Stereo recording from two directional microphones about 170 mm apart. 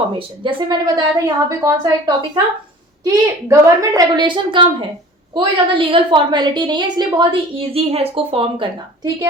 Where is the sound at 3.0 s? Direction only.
20° right (ahead or behind).